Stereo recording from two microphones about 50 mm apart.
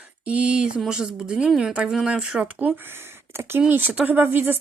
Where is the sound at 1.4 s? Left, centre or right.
Centre.